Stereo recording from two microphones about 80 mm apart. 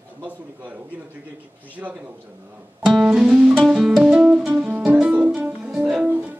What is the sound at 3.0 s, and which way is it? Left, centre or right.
Music, centre.